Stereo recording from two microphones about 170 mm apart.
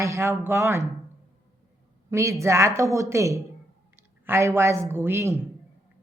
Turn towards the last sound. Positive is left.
turn(degrees=-15)  # may be behind; listen again after turning